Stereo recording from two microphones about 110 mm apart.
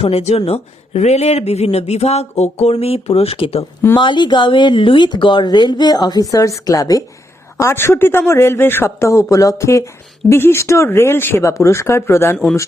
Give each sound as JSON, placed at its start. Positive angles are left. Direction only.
{"t": 0.0, "sound": "speech", "side_deg": 65}
{"t": 4.0, "sound": "a man's voice", "side_deg": 45}